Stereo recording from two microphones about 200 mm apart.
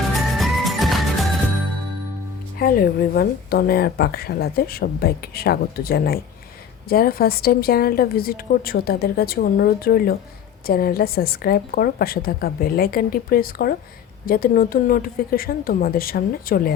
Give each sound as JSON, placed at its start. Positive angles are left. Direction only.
{"t": 0.1, "sound": "music", "side_deg": 0}
{"t": 2.6, "sound": "a woman's voice", "side_deg": 45}